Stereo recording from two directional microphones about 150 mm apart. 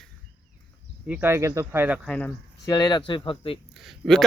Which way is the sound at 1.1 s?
15° right (ahead or behind).